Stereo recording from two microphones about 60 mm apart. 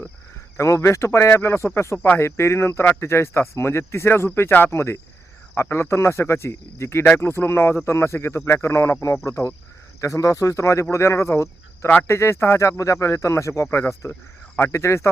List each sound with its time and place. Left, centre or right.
0.5 s speech: left
9.2 s speech: left
14.0 s speech: left